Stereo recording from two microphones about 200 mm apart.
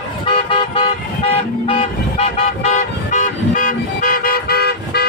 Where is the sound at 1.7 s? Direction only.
30° left (ahead or behind).